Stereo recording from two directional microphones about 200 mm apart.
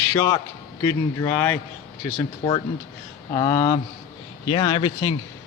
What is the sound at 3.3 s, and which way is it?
Speech, 20° left (ahead or behind).